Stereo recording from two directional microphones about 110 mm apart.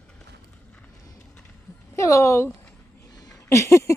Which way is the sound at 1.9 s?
25° left (ahead or behind).